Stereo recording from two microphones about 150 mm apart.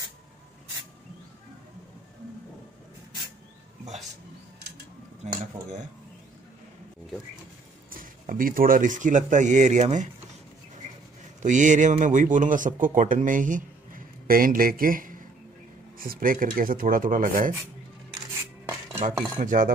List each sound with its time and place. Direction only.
5.2 s speech: 50° right (ahead or behind)
7.9 s a man's voice: 65° right (ahead or behind)
11.4 s a man's voice: 55° right (ahead or behind)
19.3 s a man's voice: 60° right (ahead or behind)